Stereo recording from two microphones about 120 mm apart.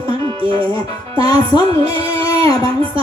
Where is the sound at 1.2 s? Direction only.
35° left (ahead or behind).